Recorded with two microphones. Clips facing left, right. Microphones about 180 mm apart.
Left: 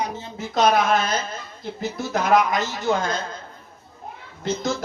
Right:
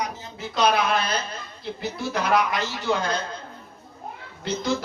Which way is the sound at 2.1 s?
45° left (ahead or behind).